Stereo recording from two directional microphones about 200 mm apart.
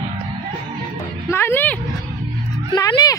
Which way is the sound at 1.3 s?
10° left (ahead or behind).